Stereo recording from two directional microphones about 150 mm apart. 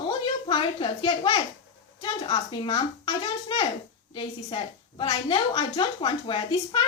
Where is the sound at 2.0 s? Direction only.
30° left (ahead or behind).